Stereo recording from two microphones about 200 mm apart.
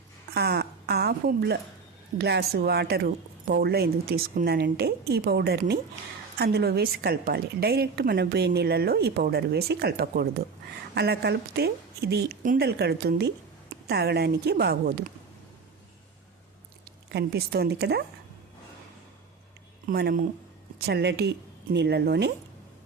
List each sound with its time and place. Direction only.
0.3 s a woman's voice: 55° right (ahead or behind)
17.1 s a woman's voice: 55° right (ahead or behind)
19.9 s a woman's voice: 50° right (ahead or behind)